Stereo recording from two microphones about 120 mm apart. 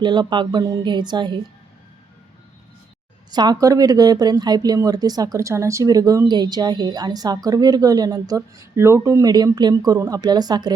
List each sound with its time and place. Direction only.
0.0 s speech: 40° right (ahead or behind)
3.3 s speech: 35° right (ahead or behind)